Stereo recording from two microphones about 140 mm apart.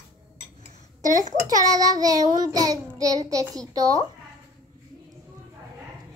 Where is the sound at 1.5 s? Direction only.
25° right (ahead or behind).